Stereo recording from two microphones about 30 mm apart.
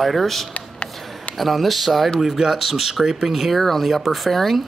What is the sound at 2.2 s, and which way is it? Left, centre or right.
Speech, centre.